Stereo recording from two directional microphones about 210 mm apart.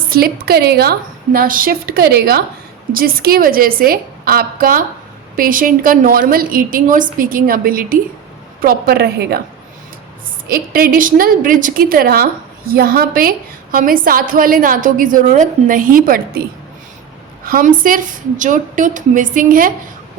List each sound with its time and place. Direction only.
0.1 s a woman's voice: 45° right (ahead or behind)
10.5 s a woman's voice: 45° right (ahead or behind)
17.4 s a woman's voice: 45° right (ahead or behind)